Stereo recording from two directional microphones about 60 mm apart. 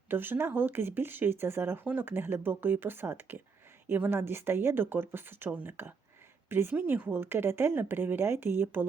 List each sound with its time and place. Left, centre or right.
0.1 s a woman's voice: right